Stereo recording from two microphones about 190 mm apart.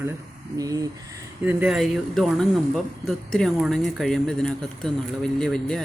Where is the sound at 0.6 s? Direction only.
20° right (ahead or behind).